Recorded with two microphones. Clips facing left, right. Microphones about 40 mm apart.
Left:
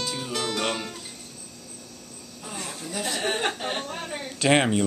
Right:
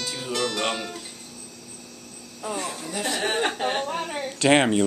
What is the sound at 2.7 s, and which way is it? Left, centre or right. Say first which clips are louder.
Speech: right 2 dB; centre.